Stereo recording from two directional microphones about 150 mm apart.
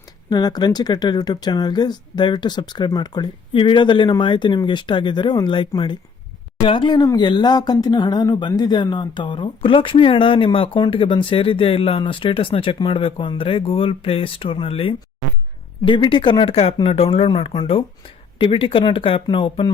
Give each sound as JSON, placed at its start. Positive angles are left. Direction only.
{"t": 0.3, "sound": "speech", "side_deg": 25}